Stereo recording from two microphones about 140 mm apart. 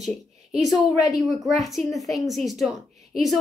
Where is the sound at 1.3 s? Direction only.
Centre (ahead or behind).